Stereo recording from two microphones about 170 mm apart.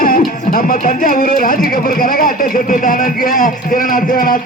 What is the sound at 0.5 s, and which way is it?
Speech, 55° left (ahead or behind).